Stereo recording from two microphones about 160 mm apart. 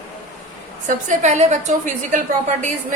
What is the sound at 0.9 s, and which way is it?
A woman's voice, 45° right (ahead or behind).